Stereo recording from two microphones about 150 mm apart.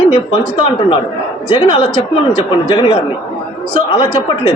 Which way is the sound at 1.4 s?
40° left (ahead or behind).